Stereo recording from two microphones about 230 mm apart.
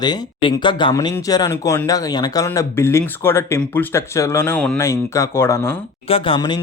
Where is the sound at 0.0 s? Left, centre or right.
Centre.